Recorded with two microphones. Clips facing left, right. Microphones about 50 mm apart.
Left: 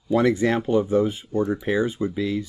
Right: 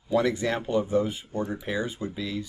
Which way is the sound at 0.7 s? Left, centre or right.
Left.